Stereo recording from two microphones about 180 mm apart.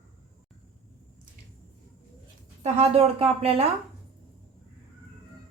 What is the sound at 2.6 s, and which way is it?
Speech, 35° right (ahead or behind).